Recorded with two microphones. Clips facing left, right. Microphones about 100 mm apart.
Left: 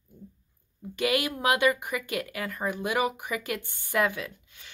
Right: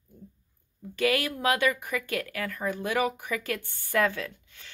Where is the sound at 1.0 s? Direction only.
15° left (ahead or behind).